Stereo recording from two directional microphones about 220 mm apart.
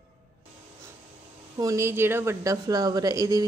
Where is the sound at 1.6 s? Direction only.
15° right (ahead or behind).